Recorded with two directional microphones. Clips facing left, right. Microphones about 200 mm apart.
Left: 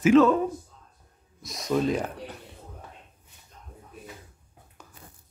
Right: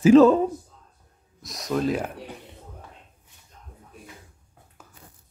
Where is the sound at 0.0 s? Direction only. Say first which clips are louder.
Right 4 dB; 35° right (ahead or behind).